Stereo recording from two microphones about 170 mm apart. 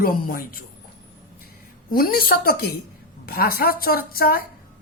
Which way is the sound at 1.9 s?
60° left (ahead or behind).